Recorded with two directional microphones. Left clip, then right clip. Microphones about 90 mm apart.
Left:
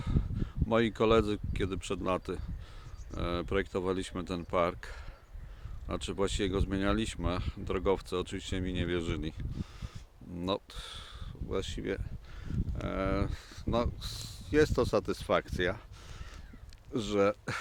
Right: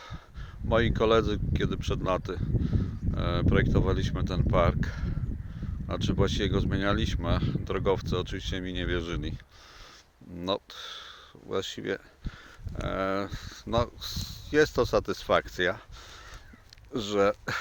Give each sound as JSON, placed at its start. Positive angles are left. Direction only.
{"t": 0.0, "sound": "speech", "side_deg": 35}
{"t": 11.4, "sound": "speech", "side_deg": 15}
{"t": 16.9, "sound": "speech", "side_deg": 30}